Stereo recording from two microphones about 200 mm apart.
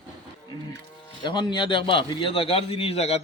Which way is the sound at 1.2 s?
25° left (ahead or behind).